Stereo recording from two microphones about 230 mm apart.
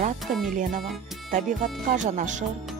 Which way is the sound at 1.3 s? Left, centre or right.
Right.